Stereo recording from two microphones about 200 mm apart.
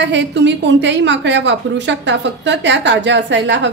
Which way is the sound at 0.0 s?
60° right (ahead or behind).